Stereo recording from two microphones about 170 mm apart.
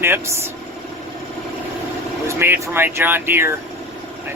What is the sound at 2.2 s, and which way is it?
Speech, 15° right (ahead or behind).